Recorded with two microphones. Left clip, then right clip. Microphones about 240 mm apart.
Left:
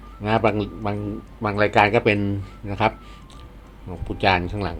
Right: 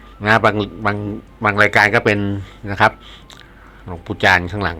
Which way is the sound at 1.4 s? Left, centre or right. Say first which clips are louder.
Right 5 dB; right.